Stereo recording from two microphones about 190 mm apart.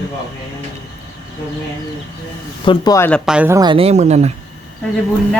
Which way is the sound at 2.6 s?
20° left (ahead or behind).